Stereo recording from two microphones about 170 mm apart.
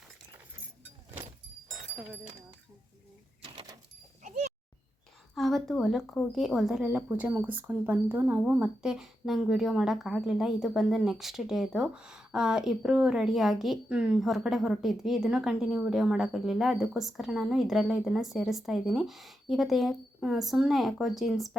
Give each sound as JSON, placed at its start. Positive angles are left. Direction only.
{"t": 3.4, "sound": "a sound", "side_deg": -30}
{"t": 4.2, "sound": "speech", "side_deg": -40}
{"t": 5.3, "sound": "speech", "side_deg": 0}